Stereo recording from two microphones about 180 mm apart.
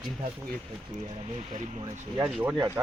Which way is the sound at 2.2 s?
5° right (ahead or behind).